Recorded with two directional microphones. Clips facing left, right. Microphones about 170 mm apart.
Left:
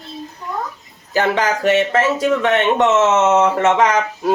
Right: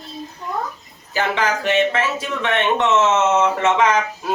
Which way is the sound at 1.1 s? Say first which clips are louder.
Left 3 dB; 40° left (ahead or behind).